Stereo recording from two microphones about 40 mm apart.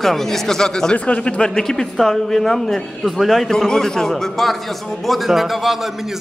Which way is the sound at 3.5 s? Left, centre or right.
Centre.